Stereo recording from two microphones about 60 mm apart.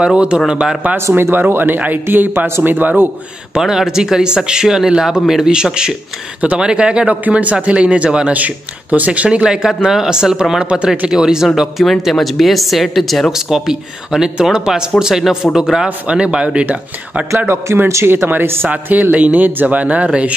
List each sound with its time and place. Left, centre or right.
0.0 s a man's voice: centre
0.9 s speech: right
3.5 s a man's voice: centre
16.1 s a man's voice: centre
17.8 s speech: right
18.7 s speech: right